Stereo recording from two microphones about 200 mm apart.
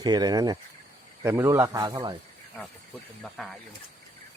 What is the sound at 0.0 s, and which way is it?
A man's voice, 20° right (ahead or behind).